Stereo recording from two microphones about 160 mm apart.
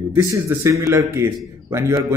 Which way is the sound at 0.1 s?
15° right (ahead or behind).